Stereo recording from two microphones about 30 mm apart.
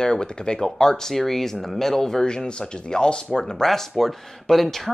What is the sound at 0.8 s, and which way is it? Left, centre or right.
Speech, centre.